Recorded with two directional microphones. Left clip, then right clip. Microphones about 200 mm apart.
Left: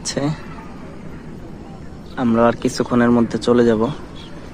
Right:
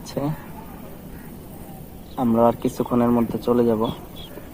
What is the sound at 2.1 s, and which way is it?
Speech, 10° left (ahead or behind).